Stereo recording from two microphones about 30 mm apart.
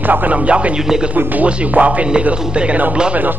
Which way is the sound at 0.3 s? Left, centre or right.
Right.